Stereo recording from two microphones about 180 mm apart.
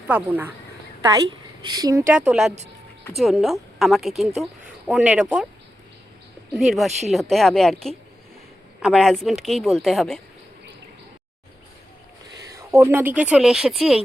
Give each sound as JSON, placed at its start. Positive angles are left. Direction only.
{"t": 0.1, "sound": "speech", "side_deg": -10}
{"t": 1.1, "sound": "speech", "side_deg": -25}
{"t": 2.1, "sound": "speech", "side_deg": -5}
{"t": 6.5, "sound": "speech", "side_deg": 0}
{"t": 8.8, "sound": "speech", "side_deg": 0}
{"t": 12.4, "sound": "speech", "side_deg": -20}